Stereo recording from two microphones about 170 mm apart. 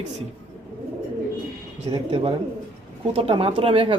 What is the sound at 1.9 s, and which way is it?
A man's voice, 35° right (ahead or behind).